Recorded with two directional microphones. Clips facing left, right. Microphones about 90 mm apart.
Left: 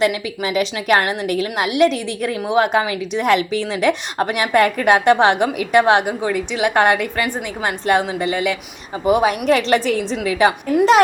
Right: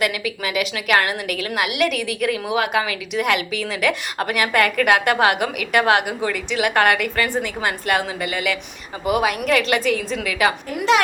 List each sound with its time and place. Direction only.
0.0 s a woman's voice: 30° left (ahead or behind)